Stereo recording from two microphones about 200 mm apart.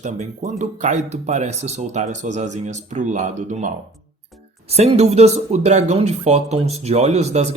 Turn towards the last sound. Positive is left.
turn(degrees=-35)  # may be behind; listen again after turning